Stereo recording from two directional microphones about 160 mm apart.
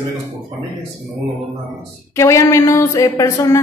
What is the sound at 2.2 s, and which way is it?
Speech, 15° left (ahead or behind).